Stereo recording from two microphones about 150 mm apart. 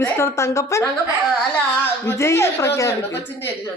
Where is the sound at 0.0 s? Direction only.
15° left (ahead or behind).